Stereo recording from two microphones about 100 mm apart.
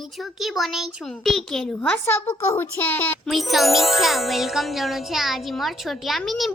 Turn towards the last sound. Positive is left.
turn(degrees=0)  # may be behind; listen again after turning